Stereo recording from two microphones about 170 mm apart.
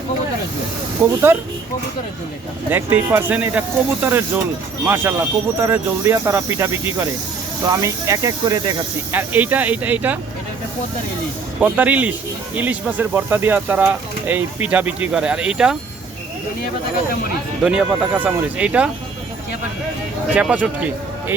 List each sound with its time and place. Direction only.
1.0 s speech: 10° right (ahead or behind)
2.6 s speech: 10° right (ahead or behind)
9.1 s speech: 10° right (ahead or behind)
11.6 s speech: 10° right (ahead or behind)
17.6 s speech: 5° right (ahead or behind)
20.3 s speech: 10° right (ahead or behind)